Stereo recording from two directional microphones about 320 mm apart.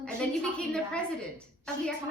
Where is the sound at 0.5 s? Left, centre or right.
Centre.